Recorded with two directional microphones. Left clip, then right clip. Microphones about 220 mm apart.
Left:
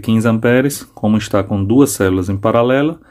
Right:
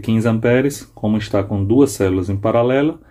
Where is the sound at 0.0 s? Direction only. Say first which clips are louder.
Left 3 dB; 20° left (ahead or behind).